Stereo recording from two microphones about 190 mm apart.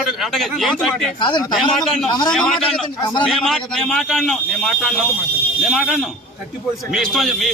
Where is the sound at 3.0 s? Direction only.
25° left (ahead or behind).